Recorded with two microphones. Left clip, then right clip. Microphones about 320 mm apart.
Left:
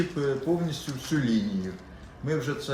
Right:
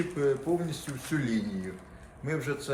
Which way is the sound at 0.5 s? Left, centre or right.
Centre.